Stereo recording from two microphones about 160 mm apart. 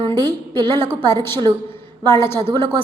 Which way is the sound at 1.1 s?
15° left (ahead or behind).